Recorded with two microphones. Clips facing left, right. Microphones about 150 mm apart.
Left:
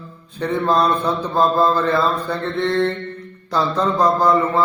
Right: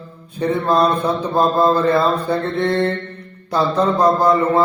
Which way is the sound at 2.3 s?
55° right (ahead or behind).